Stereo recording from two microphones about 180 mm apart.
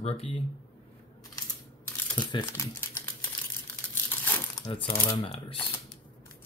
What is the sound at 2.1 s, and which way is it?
Speech, 25° left (ahead or behind).